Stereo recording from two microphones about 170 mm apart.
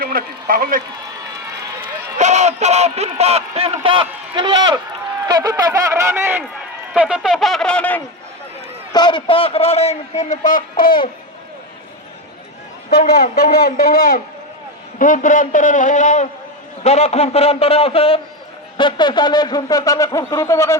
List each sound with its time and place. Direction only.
0.0 s a man's voice: 60° right (ahead or behind)
2.1 s a man's voice: 45° right (ahead or behind); by 8.0 s 10° left (ahead or behind)
8.9 s a man's voice: 25° left (ahead or behind); by 11.0 s 55° left (ahead or behind)
13.3 s speech: 70° left (ahead or behind)
14.9 s a man's voice: 50° left (ahead or behind); by 20.7 s 15° left (ahead or behind)